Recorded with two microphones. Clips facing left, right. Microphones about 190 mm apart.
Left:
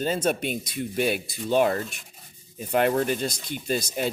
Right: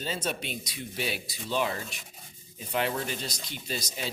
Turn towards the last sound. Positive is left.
turn(degrees=55)  # may be behind; listen again after turning